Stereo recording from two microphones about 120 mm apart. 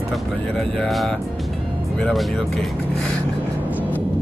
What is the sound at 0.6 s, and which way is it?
Speech, centre (ahead or behind).